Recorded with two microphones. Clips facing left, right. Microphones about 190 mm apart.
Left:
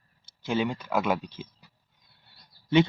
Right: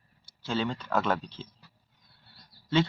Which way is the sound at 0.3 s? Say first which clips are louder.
Left 3 dB; 15° left (ahead or behind).